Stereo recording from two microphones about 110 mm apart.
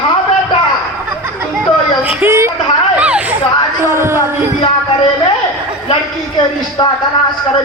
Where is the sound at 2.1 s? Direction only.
20° right (ahead or behind).